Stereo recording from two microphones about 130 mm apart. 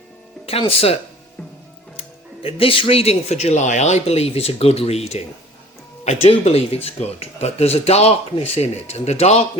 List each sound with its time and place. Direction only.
0.4 s speech: 45° left (ahead or behind)
2.0 s speech: 45° left (ahead or behind)